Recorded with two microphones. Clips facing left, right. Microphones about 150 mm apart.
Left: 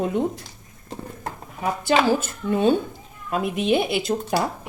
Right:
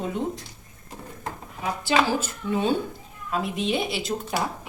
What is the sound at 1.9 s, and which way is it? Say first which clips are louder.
A woman's voice: left 3 dB; 55° left (ahead or behind).